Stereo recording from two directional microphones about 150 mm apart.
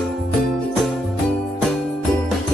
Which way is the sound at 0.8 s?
Centre (ahead or behind).